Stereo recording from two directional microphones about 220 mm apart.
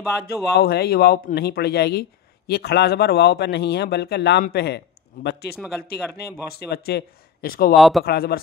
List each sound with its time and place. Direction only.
0.3 s speech: 45° left (ahead or behind)
7.7 s speech: centre (ahead or behind)
8.0 s speech: 45° left (ahead or behind)